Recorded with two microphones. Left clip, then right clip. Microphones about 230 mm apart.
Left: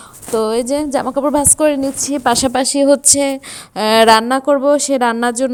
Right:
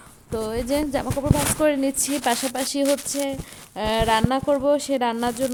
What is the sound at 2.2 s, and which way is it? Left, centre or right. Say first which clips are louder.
A woman's voice: left 11 dB; left.